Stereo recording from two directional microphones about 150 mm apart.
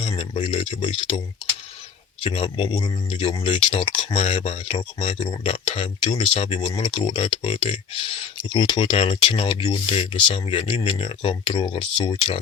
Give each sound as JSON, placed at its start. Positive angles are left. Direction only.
{"t": 0.2, "sound": "speech", "side_deg": 40}
{"t": 2.2, "sound": "speech", "side_deg": 40}